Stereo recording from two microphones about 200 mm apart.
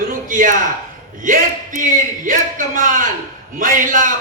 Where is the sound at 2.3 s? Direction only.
40° right (ahead or behind).